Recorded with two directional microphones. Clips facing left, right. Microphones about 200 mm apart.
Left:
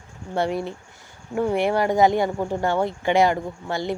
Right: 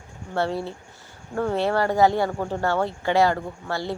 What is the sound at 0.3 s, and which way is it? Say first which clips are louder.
Speech: left 1 dB; 15° left (ahead or behind).